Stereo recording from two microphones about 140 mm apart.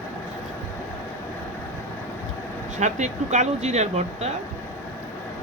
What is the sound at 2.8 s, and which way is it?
Speech, 55° right (ahead or behind).